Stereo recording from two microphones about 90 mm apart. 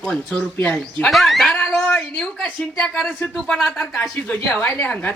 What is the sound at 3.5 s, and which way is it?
Speech, centre (ahead or behind).